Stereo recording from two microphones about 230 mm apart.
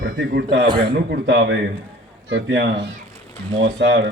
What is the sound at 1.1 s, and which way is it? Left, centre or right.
A man's voice, right.